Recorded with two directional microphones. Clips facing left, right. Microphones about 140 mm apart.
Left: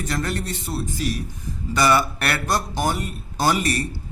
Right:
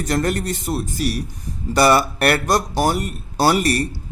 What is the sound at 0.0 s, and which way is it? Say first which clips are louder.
Speech: right 6 dB; 40° right (ahead or behind).